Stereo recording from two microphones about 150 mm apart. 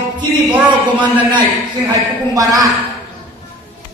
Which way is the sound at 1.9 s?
25° right (ahead or behind).